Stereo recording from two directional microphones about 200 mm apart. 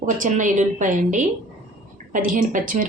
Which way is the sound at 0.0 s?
40° right (ahead or behind).